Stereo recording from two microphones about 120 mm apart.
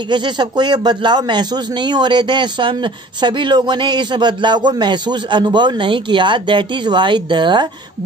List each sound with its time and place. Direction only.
0.1 s speech: 40° right (ahead or behind)